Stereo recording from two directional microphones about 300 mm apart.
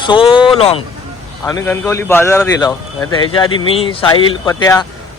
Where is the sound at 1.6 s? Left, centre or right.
Centre.